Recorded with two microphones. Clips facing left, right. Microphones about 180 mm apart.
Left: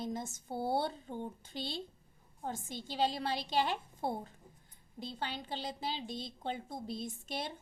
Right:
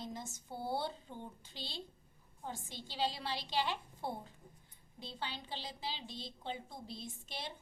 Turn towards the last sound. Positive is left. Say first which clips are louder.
# left 6 dB
turn(degrees=50)  # may be behind; listen again after turning